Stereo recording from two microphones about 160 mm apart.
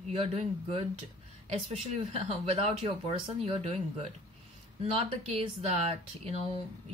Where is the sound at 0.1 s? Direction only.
40° right (ahead or behind).